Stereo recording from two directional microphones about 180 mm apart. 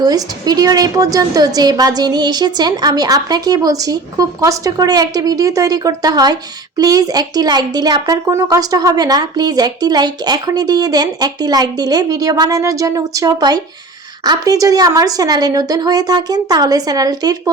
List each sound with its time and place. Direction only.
0.0 s speech: 20° right (ahead or behind)